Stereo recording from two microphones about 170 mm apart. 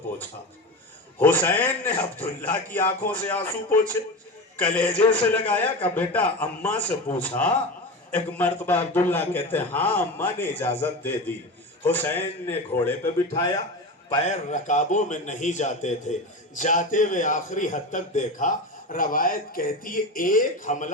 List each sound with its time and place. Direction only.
1.2 s a man's voice: 10° left (ahead or behind)
14.3 s a man's voice: 45° left (ahead or behind)